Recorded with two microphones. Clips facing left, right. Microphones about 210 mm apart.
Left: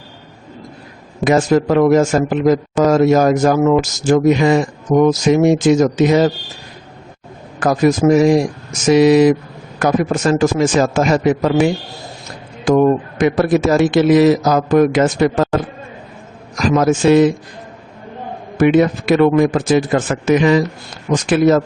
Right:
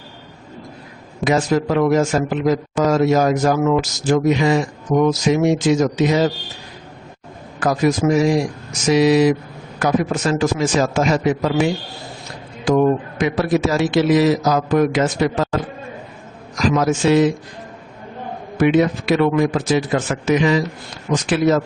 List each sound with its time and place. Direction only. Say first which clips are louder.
1.2 s a man's voice: left 4 dB; 50° left (ahead or behind)
7.6 s a man's voice: left 4 dB; 50° left (ahead or behind)
12.6 s a man's voice: left 3 dB; 50° left (ahead or behind)
16.6 s a man's voice: left 3 dB; 50° left (ahead or behind)
18.5 s a man's voice: left 3 dB; 50° left (ahead or behind)